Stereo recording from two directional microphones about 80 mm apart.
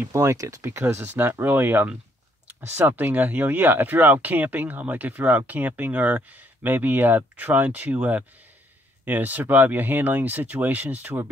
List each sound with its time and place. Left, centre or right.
0.1 s speech: right